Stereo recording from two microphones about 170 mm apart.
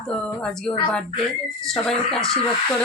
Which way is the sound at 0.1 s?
5° left (ahead or behind).